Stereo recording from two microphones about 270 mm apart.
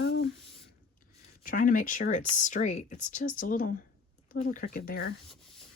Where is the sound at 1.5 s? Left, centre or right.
Left.